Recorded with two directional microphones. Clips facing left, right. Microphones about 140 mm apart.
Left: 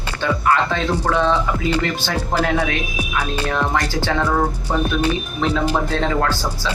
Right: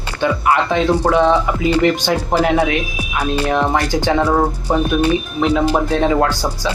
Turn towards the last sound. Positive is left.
turn(degrees=-15)  # may be behind; listen again after turning